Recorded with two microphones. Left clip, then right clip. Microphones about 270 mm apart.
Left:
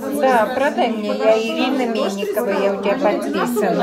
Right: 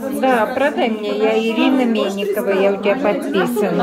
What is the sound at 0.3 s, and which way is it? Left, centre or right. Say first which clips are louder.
Speech: right 1 dB; right.